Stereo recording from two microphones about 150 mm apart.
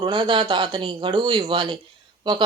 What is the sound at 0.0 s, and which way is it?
A woman's voice, 30° right (ahead or behind).